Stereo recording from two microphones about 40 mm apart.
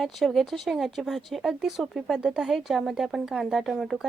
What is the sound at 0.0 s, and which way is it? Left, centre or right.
A woman's voice, centre.